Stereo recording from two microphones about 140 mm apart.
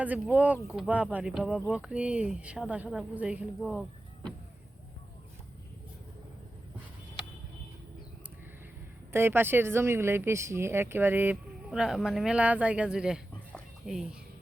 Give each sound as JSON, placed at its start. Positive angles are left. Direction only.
{"t": 0.0, "sound": "speech", "side_deg": -10}
{"t": 9.1, "sound": "speech", "side_deg": -15}